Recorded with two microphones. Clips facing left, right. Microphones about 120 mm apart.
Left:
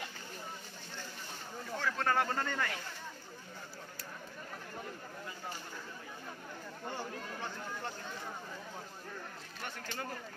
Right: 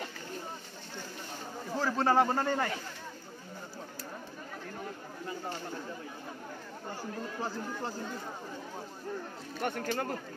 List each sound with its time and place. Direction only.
1.8 s speech: 35° right (ahead or behind)
7.4 s speech: 35° right (ahead or behind)
9.6 s speech: 55° right (ahead or behind)